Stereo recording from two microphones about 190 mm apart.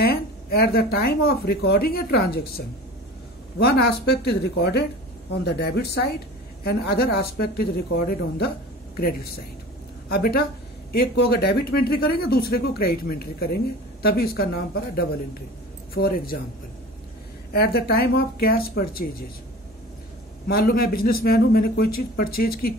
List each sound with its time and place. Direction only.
0.0 s a woman's voice: 55° left (ahead or behind)
17.5 s speech: 55° left (ahead or behind)
20.4 s speech: 50° left (ahead or behind)